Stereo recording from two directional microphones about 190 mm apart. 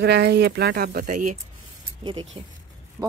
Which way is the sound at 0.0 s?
60° right (ahead or behind).